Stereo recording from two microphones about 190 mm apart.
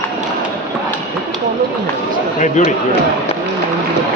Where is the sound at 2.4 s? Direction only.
40° left (ahead or behind).